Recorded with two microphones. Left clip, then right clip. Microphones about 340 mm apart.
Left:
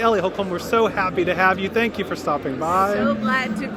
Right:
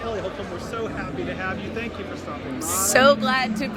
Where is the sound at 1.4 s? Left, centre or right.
Left.